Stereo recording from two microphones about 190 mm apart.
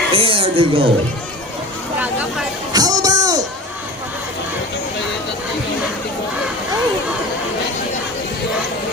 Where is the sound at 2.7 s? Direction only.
20° right (ahead or behind).